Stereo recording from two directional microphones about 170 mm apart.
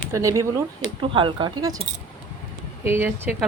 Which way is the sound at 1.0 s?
30° right (ahead or behind).